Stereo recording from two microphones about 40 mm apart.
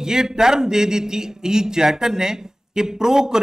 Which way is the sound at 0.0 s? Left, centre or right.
Centre.